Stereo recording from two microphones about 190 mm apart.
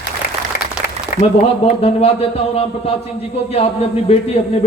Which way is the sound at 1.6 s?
30° left (ahead or behind).